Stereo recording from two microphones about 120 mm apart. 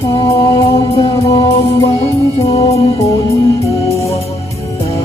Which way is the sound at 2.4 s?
55° left (ahead or behind).